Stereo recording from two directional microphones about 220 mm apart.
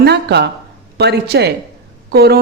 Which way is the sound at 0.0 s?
50° right (ahead or behind).